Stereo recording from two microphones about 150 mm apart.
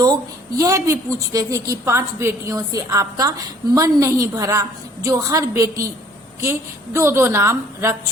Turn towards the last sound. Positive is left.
turn(degrees=-15)  # may be behind; listen again after turning